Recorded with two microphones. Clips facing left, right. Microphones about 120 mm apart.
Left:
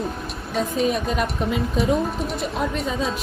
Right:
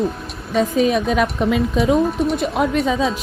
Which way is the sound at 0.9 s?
85° right.